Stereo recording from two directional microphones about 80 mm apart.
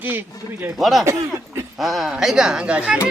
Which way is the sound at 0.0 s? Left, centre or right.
Right.